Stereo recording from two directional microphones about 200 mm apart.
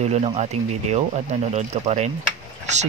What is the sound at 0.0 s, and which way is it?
Speech, 30° right (ahead or behind).